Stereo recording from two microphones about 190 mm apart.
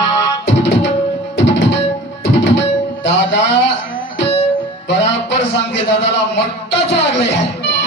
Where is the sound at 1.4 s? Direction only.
70° left (ahead or behind).